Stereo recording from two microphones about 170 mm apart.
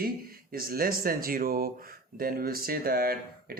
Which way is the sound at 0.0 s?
60° right (ahead or behind).